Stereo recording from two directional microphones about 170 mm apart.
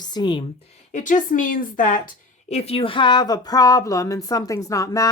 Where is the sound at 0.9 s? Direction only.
50° left (ahead or behind).